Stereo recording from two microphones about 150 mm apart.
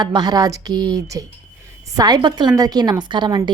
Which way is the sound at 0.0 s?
30° right (ahead or behind).